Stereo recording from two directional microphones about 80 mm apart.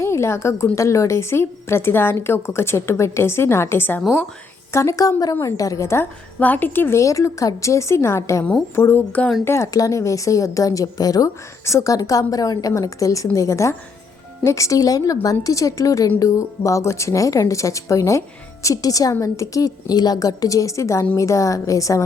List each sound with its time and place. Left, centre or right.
0.0 s a woman's voice: left
4.7 s a woman's voice: left
6.4 s a woman's voice: left
7.0 s a woman's voice: left
9.7 s a woman's voice: left
11.6 s a woman's voice: left